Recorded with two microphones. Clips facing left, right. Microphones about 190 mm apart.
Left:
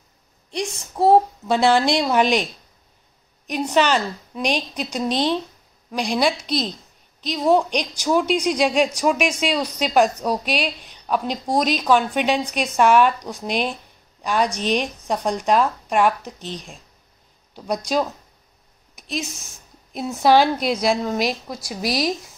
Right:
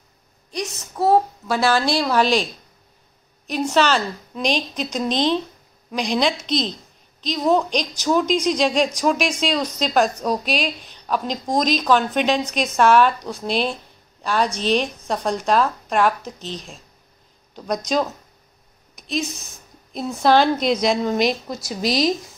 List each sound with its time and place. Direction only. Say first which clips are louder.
0.5 s a child's voice: left 1 dB; 25° left (ahead or behind)
3.7 s speech: left 1 dB; 15° left (ahead or behind)
19.9 s speech: left 1 dB; 10° left (ahead or behind)